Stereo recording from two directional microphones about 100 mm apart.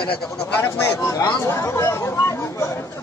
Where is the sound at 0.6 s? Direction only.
25° left (ahead or behind).